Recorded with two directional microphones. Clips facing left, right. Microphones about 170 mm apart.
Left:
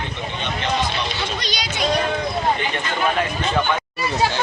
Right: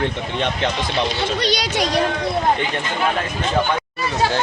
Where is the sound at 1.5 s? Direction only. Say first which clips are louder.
Right 4 dB; 75° right (ahead or behind).